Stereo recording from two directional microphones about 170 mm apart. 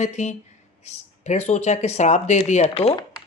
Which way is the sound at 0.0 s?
45° left (ahead or behind).